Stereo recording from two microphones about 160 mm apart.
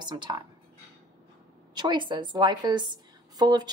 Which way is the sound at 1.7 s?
30° right (ahead or behind).